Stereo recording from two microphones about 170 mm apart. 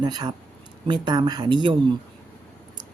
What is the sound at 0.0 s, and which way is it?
A woman's voice, 25° right (ahead or behind).